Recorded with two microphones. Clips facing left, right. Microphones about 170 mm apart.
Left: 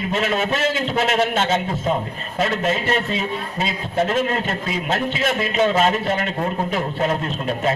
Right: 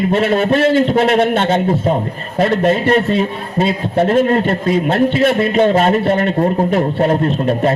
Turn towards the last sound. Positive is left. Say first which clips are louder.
# right 8 dB
turn(degrees=-50)  # may be behind; listen again after turning